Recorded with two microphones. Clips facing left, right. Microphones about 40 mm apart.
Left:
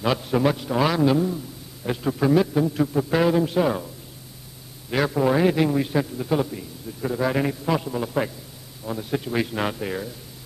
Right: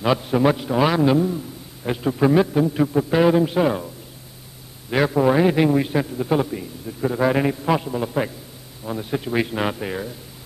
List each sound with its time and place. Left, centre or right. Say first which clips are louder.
0.0 s a man's voice: right 3 dB; centre
4.9 s a man's voice: right 3 dB; centre